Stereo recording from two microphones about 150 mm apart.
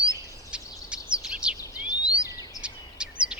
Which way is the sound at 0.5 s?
5° right (ahead or behind).